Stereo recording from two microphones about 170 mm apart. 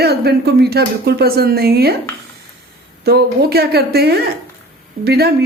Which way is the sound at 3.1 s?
70° right (ahead or behind).